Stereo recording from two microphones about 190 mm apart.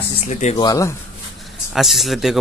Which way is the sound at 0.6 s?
20° left (ahead or behind).